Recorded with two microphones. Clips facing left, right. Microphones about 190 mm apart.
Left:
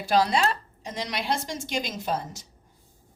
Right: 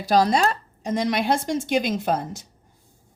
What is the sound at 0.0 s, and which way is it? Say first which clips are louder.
Speech: right 4 dB; 40° right (ahead or behind).